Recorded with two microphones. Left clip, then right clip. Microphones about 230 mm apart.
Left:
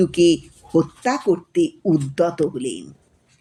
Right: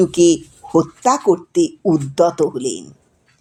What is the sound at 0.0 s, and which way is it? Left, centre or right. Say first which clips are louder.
Speech: right 3 dB; right.